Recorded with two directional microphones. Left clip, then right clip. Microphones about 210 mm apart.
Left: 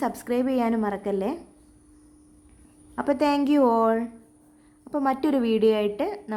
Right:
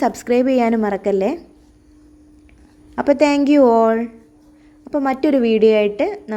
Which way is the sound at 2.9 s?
15° right (ahead or behind).